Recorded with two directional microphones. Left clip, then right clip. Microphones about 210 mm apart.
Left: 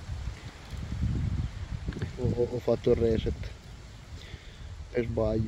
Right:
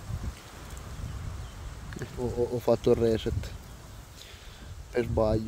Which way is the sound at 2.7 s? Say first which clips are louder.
Right 2 dB; 10° right (ahead or behind).